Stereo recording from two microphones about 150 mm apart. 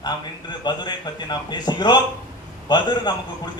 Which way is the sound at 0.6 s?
30° left (ahead or behind).